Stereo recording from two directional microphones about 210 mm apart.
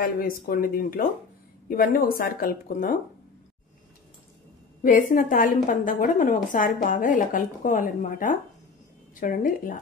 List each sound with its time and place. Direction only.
0.2 s speech: 45° left (ahead or behind)
4.8 s a woman's voice: 40° left (ahead or behind)